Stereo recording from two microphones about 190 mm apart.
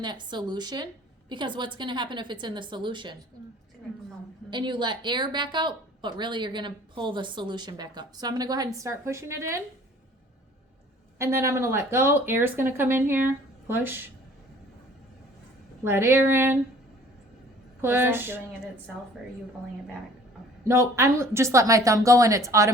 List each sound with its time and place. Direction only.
0.0 s a woman's voice: 25° right (ahead or behind)
4.4 s a woman's voice: 25° right (ahead or behind)
11.2 s speech: 15° right (ahead or behind)
15.8 s speech: 10° right (ahead or behind)
17.7 s speech: 10° right (ahead or behind)
20.7 s speech: 15° right (ahead or behind)